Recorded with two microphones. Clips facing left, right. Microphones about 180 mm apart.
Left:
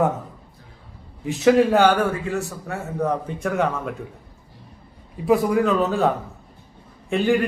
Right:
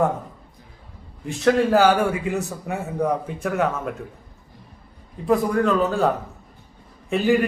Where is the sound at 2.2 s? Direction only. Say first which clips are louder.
Right 1 dB; 15° right (ahead or behind); by 3.9 s centre (ahead or behind).